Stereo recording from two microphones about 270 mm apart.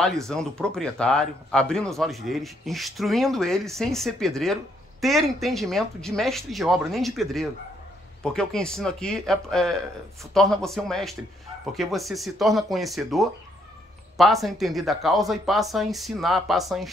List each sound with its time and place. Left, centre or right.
0.3 s speech: centre